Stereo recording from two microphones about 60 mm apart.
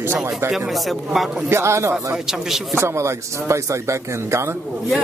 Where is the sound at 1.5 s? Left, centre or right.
Right.